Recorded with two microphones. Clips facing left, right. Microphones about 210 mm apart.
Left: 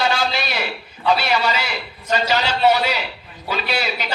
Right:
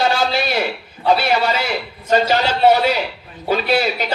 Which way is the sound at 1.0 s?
50° right (ahead or behind).